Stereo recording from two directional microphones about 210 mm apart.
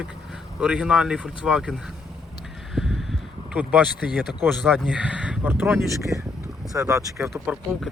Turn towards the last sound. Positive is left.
turn(degrees=0)  # may be behind; listen again after turning